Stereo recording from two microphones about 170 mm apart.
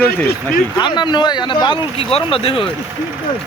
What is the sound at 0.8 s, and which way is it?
Speech, 25° left (ahead or behind).